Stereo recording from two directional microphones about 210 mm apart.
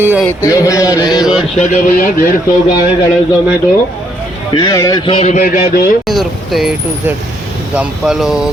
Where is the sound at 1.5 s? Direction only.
40° left (ahead or behind).